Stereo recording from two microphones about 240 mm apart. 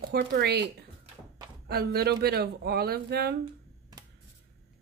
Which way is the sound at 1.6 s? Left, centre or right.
Right.